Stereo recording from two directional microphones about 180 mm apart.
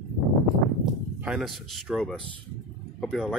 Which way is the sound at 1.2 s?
Centre (ahead or behind).